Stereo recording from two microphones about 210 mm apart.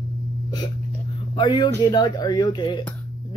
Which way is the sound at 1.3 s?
20° left (ahead or behind).